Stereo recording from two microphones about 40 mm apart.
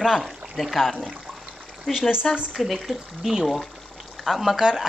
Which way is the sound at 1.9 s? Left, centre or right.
Centre.